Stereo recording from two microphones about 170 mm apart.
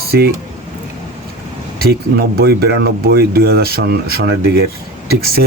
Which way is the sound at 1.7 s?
65° right (ahead or behind).